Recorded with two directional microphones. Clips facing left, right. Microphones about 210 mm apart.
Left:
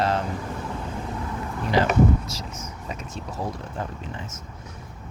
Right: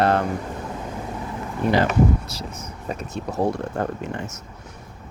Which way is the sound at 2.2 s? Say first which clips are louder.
Right 1 dB; 60° right (ahead or behind).